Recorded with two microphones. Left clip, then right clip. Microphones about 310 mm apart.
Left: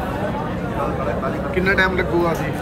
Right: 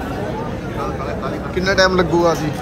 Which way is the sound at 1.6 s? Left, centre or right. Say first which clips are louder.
Right 4 dB; centre.